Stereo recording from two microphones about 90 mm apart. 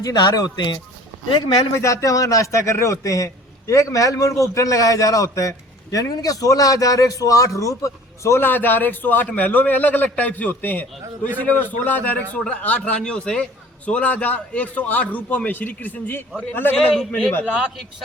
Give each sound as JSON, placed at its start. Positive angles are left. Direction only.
{"t": 0.0, "sound": "speech", "side_deg": 50}
{"t": 1.7, "sound": "a man's voice", "side_deg": 35}
{"t": 8.4, "sound": "a man's voice", "side_deg": 20}
{"t": 16.7, "sound": "a man's voice", "side_deg": 0}